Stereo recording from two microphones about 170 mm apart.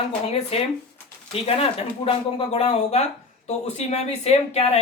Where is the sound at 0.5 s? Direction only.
35° left (ahead or behind).